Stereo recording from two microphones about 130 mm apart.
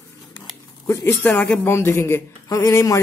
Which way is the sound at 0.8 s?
20° left (ahead or behind).